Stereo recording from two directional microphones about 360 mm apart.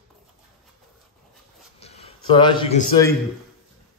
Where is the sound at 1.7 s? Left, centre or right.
Centre.